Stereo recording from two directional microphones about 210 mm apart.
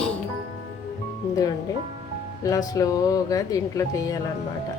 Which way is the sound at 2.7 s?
15° left (ahead or behind).